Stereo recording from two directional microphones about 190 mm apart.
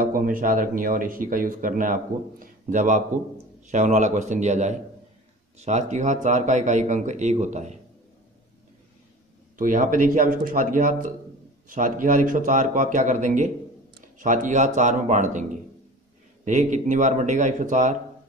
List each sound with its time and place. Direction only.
0.0 s speech: 45° right (ahead or behind)
9.6 s speech: 45° right (ahead or behind)
16.4 s speech: 40° right (ahead or behind)